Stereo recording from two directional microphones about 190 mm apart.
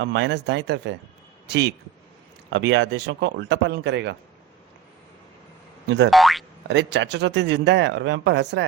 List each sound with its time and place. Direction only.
0.0 s a man's voice: 65° right (ahead or behind)
6.1 s boing: centre (ahead or behind)
6.7 s speech: 65° right (ahead or behind)